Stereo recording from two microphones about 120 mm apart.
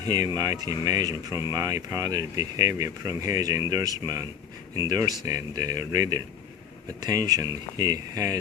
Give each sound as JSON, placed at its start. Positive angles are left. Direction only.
{"t": 0.0, "sound": "speech", "side_deg": -35}